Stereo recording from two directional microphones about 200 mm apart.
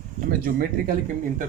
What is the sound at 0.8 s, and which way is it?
Speech, 45° right (ahead or behind).